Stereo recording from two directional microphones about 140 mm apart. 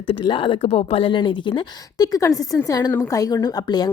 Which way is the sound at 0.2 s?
35° left (ahead or behind).